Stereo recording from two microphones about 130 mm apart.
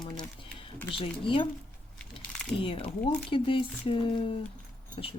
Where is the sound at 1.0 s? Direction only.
40° left (ahead or behind).